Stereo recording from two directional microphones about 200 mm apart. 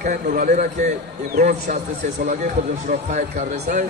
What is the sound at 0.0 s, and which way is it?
A man's voice, 45° right (ahead or behind).